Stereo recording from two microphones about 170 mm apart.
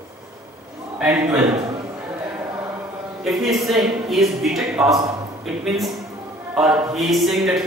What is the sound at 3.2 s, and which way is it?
Speech, centre (ahead or behind).